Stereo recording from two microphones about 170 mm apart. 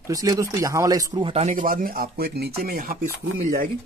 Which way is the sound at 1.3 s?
45° right (ahead or behind).